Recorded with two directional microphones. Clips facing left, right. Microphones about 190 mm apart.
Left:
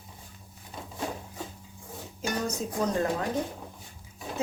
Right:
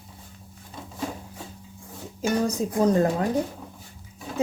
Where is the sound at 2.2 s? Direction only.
35° right (ahead or behind).